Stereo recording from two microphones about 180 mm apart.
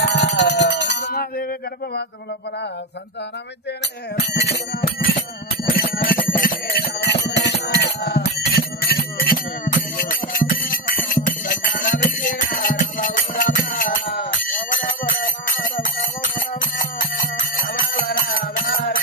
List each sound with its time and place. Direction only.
0.0 s a sound: 75° left (ahead or behind)
4.2 s bicycle bell: 65° left (ahead or behind)
5.6 s bicycle bell: 55° left (ahead or behind)
6.3 s alarm: 50° left (ahead or behind)
16.3 s music: 50° left (ahead or behind)